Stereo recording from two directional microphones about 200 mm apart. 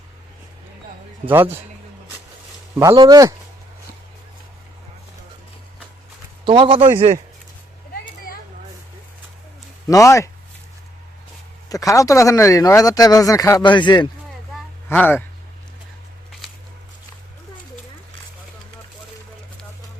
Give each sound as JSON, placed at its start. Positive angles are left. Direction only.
{"t": 1.3, "sound": "speech", "side_deg": -10}
{"t": 2.7, "sound": "speech", "side_deg": -20}
{"t": 6.4, "sound": "speech", "side_deg": -25}
{"t": 9.9, "sound": "speech", "side_deg": 15}
{"t": 11.7, "sound": "speech", "side_deg": 15}
{"t": 14.8, "sound": "speech", "side_deg": 10}